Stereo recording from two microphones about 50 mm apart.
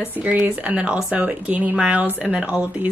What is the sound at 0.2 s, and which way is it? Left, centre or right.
Speech, right.